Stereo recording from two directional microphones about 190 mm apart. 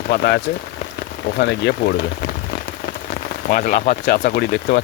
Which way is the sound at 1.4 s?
65° left (ahead or behind).